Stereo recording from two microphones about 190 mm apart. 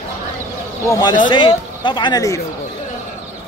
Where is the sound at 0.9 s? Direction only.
20° left (ahead or behind).